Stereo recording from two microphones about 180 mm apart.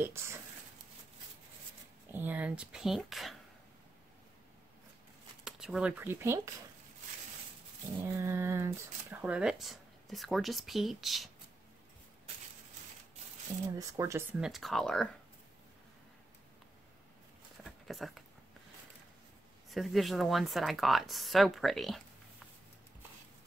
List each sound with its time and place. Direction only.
0.0 s speech: 15° right (ahead or behind)
2.1 s speech: 10° right (ahead or behind)
5.4 s speech: 5° right (ahead or behind)
8.0 s speech: 15° right (ahead or behind)
13.7 s speech: 15° right (ahead or behind)
14.4 s speech: centre (ahead or behind)
17.6 s a sound: centre (ahead or behind)
19.7 s speech: centre (ahead or behind)